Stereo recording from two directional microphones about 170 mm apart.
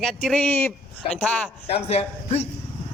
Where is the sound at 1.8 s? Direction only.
35° left (ahead or behind).